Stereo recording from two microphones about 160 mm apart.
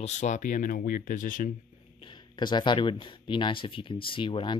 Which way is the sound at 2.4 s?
30° left (ahead or behind).